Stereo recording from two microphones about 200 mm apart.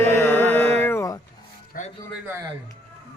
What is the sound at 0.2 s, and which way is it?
Music, 10° left (ahead or behind).